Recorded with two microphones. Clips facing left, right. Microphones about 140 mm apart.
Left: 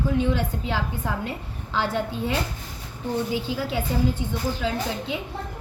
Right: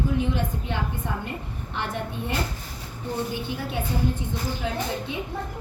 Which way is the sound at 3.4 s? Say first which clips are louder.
Left 3 dB; 90° left.